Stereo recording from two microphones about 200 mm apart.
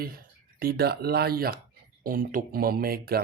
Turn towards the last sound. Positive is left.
turn(degrees=-50)  # may be behind; listen again after turning